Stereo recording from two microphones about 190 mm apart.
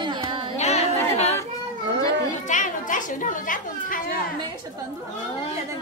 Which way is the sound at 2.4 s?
40° left (ahead or behind).